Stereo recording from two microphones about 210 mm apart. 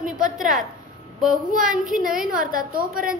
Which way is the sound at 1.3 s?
40° right (ahead or behind).